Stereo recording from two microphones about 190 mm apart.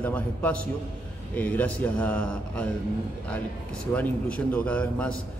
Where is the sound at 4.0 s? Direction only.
10° left (ahead or behind).